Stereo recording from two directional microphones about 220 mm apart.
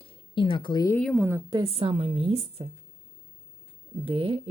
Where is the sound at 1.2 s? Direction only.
10° right (ahead or behind).